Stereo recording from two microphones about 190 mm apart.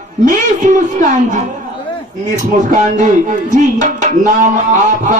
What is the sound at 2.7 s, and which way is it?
Speech, 40° right (ahead or behind).